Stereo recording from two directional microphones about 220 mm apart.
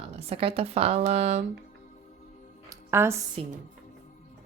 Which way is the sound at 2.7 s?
10° right (ahead or behind).